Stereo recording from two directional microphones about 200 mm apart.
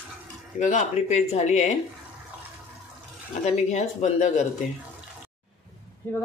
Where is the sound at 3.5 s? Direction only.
35° left (ahead or behind).